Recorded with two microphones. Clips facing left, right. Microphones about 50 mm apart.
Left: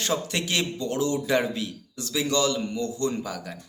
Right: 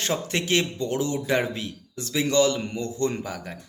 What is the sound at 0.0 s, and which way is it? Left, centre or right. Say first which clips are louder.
Speech: right 1 dB; right.